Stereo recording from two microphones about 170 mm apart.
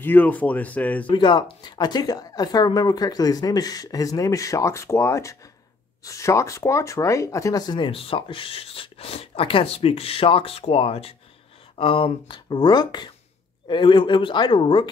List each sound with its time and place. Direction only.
0.0 s speech: 10° left (ahead or behind)
1.0 s speech: 25° left (ahead or behind)